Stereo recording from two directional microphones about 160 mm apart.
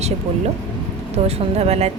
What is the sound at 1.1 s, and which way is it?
Speech, 40° right (ahead or behind).